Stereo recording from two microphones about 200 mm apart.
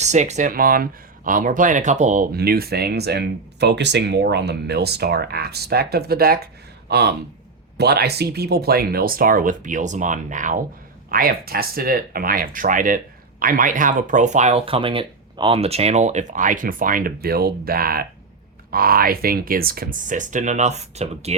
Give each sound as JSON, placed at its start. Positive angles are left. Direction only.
{"t": 0.0, "sound": "speech", "side_deg": -35}